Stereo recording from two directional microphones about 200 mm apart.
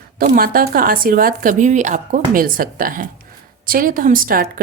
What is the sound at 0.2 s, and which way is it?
Speech, 45° right (ahead or behind).